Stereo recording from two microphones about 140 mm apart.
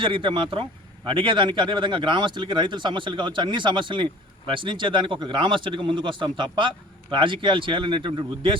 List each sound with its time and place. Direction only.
0.0 s speech: 35° right (ahead or behind)